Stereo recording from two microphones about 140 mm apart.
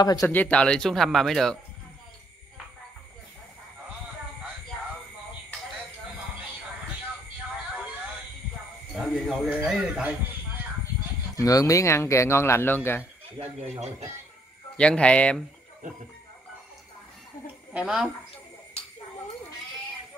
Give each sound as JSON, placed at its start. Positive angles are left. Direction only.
{"t": 0.0, "sound": "speech", "side_deg": 30}
{"t": 0.3, "sound": "speech", "side_deg": 10}
{"t": 8.9, "sound": "a sound", "side_deg": 0}
{"t": 9.5, "sound": "a man's voice", "side_deg": -10}
{"t": 11.3, "sound": "speech", "side_deg": 25}
{"t": 13.4, "sound": "speech", "side_deg": -50}
{"t": 14.8, "sound": "speech", "side_deg": 10}
{"t": 17.7, "sound": "speech", "side_deg": -5}